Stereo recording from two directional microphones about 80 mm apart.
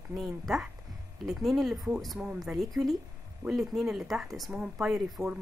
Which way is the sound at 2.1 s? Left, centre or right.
Centre.